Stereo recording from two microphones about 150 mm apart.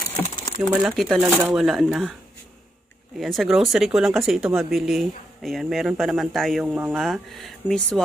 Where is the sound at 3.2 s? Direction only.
Centre (ahead or behind).